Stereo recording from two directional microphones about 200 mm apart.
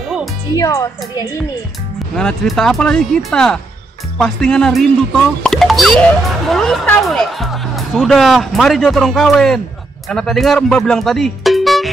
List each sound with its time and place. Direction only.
0.6 s a woman's voice: 15° left (ahead or behind)
2.1 s speech: centre (ahead or behind)